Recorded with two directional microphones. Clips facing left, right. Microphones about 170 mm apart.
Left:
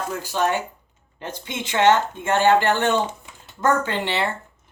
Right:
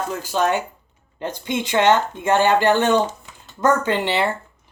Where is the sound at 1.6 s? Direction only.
15° right (ahead or behind).